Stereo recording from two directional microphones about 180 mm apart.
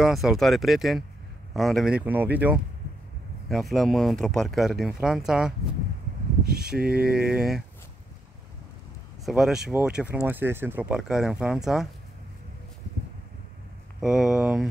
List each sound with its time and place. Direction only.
0.0 s speech: centre (ahead or behind)
6.5 s speech: 60° right (ahead or behind)
7.2 s speech: 5° right (ahead or behind)
9.2 s speech: centre (ahead or behind)
14.0 s speech: 5° right (ahead or behind)